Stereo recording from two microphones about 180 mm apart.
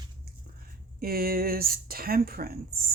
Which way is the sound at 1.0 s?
55° right (ahead or behind).